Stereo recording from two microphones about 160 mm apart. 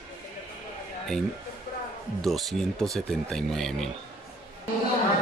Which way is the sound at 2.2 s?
Centre (ahead or behind).